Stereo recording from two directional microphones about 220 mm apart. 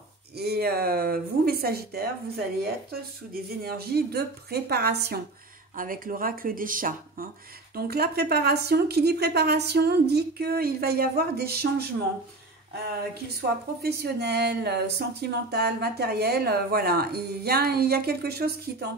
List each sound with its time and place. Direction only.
0.4 s speech: 45° right (ahead or behind)
13.4 s speech: 45° right (ahead or behind)